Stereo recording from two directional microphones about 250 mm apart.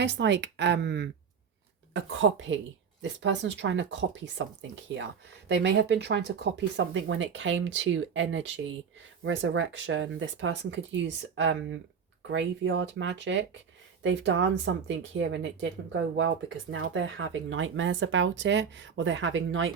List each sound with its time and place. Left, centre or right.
0.0 s speech: right